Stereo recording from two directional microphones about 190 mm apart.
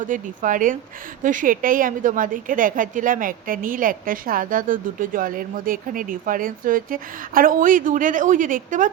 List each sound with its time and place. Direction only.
0.0 s a woman's voice: 45° right (ahead or behind)